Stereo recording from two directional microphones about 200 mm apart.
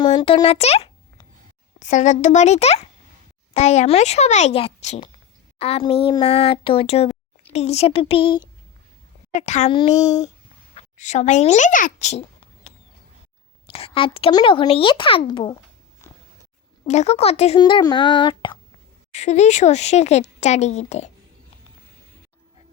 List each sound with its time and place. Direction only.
0.0 s speech: 25° left (ahead or behind)
9.3 s speech: 35° left (ahead or behind)
13.7 s speech: 30° left (ahead or behind)
16.8 s speech: 35° left (ahead or behind)
19.1 s speech: 35° left (ahead or behind)